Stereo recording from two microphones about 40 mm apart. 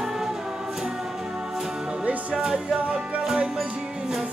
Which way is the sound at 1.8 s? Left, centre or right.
Right.